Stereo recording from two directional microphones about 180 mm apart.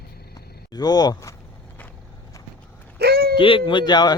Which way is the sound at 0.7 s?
20° left (ahead or behind).